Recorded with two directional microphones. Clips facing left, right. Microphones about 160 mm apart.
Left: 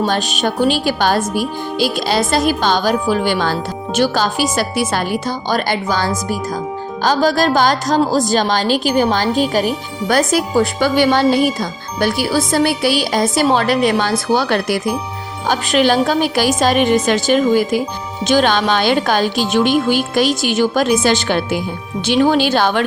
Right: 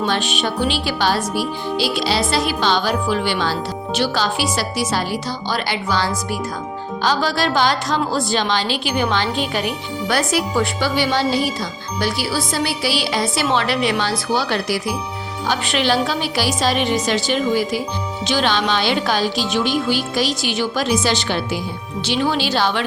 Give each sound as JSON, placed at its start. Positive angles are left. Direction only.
{"t": 0.0, "sound": "a woman's voice", "side_deg": 40}